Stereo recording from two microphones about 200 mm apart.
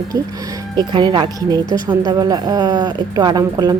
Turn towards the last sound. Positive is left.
turn(degrees=-20)  # may be behind; listen again after turning